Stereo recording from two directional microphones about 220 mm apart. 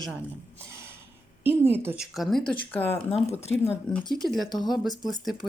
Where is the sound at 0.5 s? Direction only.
10° right (ahead or behind).